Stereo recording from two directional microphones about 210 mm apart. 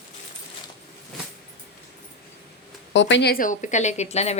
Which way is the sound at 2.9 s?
60° left (ahead or behind).